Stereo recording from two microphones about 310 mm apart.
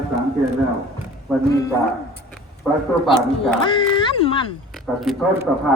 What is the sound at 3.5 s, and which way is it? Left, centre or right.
Speech, centre.